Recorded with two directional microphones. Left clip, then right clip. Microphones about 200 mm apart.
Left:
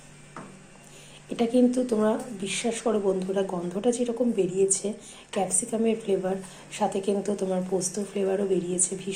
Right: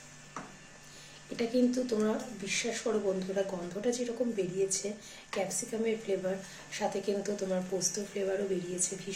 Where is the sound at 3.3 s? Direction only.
15° left (ahead or behind).